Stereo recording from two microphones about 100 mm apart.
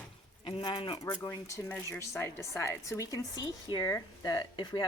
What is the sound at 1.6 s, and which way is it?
A woman's voice, 25° left (ahead or behind).